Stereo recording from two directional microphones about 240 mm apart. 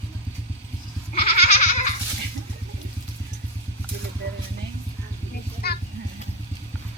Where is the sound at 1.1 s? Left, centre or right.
Left.